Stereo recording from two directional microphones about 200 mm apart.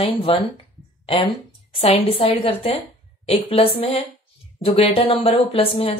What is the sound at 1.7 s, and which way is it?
Speech, 30° left (ahead or behind).